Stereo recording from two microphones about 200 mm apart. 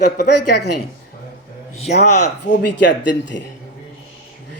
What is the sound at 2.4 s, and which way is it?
Speech, 60° left (ahead or behind).